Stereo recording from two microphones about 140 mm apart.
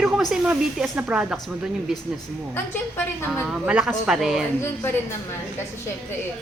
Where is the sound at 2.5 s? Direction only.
15° left (ahead or behind).